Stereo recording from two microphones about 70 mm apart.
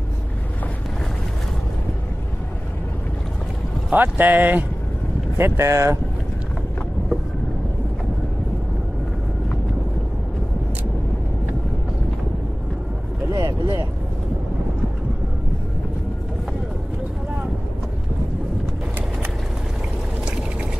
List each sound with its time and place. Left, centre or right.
3.9 s speech: right
5.4 s speech: right
13.3 s vehicle: right